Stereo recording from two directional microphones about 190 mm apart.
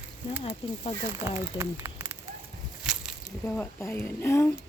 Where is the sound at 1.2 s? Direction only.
35° left (ahead or behind).